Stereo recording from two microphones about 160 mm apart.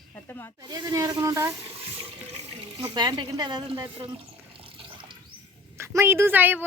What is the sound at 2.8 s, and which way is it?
Speech, 30° right (ahead or behind).